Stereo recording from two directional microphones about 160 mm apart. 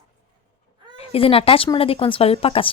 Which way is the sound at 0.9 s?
35° left (ahead or behind).